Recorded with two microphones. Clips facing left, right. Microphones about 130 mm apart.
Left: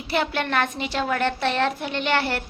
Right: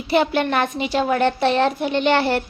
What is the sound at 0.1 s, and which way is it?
A woman's voice, 20° right (ahead or behind).